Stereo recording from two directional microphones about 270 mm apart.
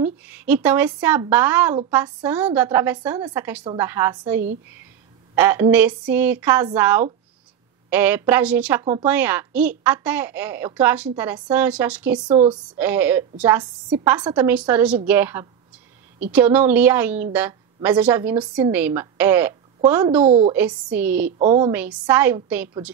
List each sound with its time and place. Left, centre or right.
0.0 s a woman's voice: centre
12.3 s a woman's voice: centre
12.6 s a woman's voice: centre
20.2 s a woman's voice: right
20.5 s speech: centre
21.4 s a woman's voice: right
21.7 s a woman's voice: centre